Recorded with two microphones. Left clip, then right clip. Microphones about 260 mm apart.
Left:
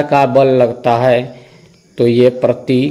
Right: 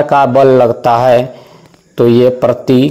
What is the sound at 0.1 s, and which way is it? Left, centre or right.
A man's voice, centre.